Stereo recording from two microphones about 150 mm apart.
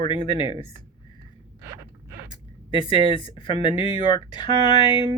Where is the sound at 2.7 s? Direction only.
35° left (ahead or behind).